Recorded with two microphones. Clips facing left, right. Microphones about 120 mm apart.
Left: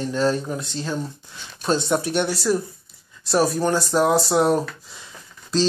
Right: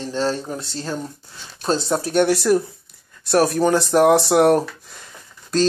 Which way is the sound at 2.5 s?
65° right (ahead or behind).